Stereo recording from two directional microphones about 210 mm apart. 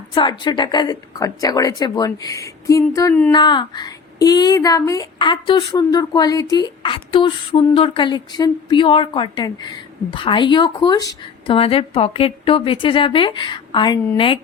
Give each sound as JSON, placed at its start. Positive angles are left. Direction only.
{"t": 0.1, "sound": "a woman's voice", "side_deg": 20}